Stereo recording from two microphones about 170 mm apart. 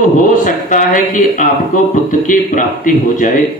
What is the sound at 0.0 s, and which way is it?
A man's voice, 50° left (ahead or behind).